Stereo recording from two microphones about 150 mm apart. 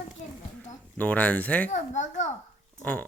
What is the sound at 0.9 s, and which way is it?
Speech, 10° left (ahead or behind).